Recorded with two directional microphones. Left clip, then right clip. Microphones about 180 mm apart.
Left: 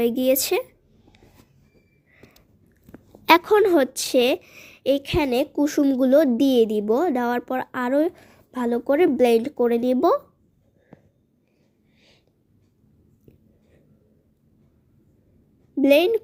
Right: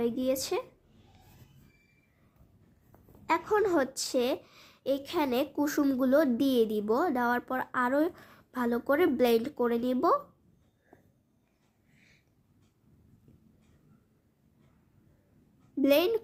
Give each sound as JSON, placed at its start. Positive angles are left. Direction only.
{"t": 0.0, "sound": "speech", "side_deg": 40}
{"t": 3.2, "sound": "a woman's voice", "side_deg": 45}
{"t": 15.7, "sound": "a woman's voice", "side_deg": 30}